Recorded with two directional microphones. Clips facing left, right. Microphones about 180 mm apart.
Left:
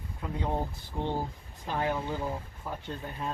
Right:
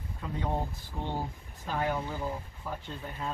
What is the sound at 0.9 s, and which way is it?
Speech, 20° left (ahead or behind).